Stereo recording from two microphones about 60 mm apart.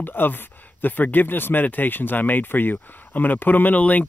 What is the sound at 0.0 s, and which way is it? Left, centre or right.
Speech, left.